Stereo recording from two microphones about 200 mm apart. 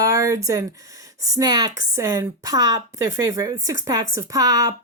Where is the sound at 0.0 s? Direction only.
15° right (ahead or behind).